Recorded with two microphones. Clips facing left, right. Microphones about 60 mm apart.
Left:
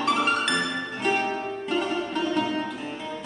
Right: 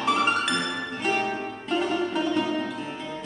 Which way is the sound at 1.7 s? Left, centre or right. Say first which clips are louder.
Right 2 dB; centre.